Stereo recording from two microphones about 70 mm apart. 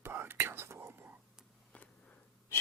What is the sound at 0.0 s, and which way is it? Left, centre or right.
Whispering, right.